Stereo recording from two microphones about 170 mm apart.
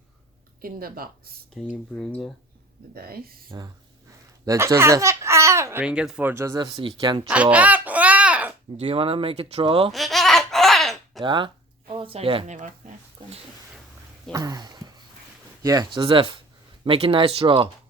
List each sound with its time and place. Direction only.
0.6 s speech: 60° right (ahead or behind)
1.5 s speech: centre (ahead or behind)
2.9 s speech: 60° right (ahead or behind)
4.4 s a sound: 15° right (ahead or behind)
5.8 s speech: 5° right (ahead or behind); by 7.3 s 25° right (ahead or behind)
7.5 s a sound: 10° right (ahead or behind)
8.8 s speech: 35° right (ahead or behind)
9.9 s a sound: centre (ahead or behind)
11.2 s speech: 30° right (ahead or behind)
12.5 s speech: 45° right (ahead or behind)
14.3 s speech: 20° right (ahead or behind)